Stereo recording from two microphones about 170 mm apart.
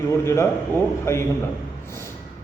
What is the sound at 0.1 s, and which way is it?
A man's voice, 15° left (ahead or behind).